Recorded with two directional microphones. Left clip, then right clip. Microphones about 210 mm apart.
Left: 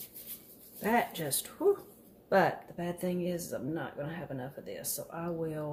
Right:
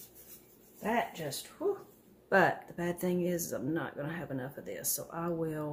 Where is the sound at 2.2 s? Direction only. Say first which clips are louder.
Even; 10° right (ahead or behind).